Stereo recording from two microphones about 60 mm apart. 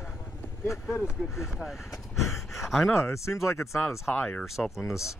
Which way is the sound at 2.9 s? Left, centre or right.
Left.